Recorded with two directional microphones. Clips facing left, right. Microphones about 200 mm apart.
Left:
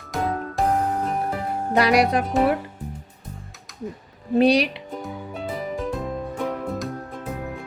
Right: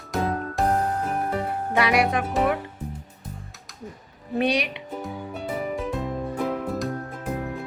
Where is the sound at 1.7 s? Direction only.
35° left (ahead or behind).